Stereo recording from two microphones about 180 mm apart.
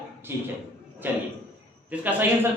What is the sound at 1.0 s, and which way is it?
A man's voice, 10° right (ahead or behind).